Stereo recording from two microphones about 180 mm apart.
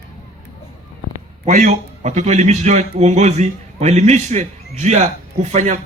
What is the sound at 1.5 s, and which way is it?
A man's voice, 45° right (ahead or behind).